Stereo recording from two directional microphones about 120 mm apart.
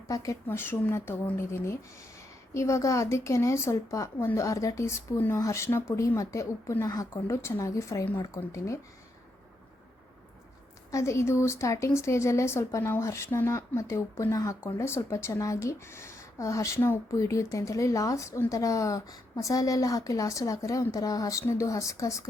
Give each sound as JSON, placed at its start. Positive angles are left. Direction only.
{"t": 0.1, "sound": "a woman's voice", "side_deg": 25}
{"t": 10.9, "sound": "a woman's voice", "side_deg": 25}